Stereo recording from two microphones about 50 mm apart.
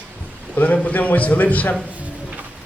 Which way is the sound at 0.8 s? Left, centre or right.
Left.